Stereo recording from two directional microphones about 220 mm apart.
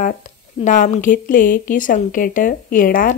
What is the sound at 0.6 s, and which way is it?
A woman's voice, 35° left (ahead or behind).